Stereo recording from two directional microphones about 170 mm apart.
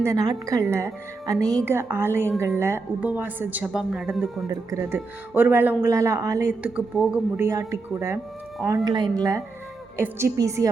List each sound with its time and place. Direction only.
0.0 s speech: 20° right (ahead or behind)
4.4 s speech: 15° right (ahead or behind)